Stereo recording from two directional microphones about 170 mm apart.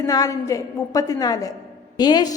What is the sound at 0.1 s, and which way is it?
A woman's voice, 20° left (ahead or behind).